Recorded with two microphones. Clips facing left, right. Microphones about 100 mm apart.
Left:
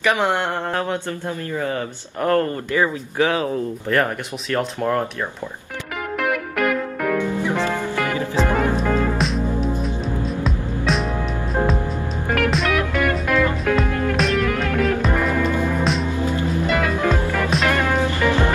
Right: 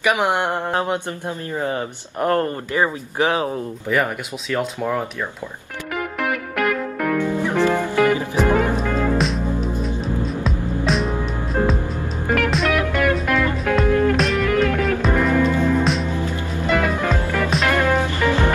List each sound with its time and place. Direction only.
0.0 s mantra: 15° right (ahead or behind)
1.6 s speech: 25° right (ahead or behind)
3.9 s speech: 5° right (ahead or behind)
6.2 s music: centre (ahead or behind)
7.6 s music: 15° right (ahead or behind)
9.2 s music: centre (ahead or behind)
12.3 s music: centre (ahead or behind)